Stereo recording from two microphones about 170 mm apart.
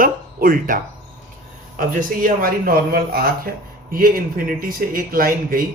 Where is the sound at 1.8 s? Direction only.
55° right (ahead or behind).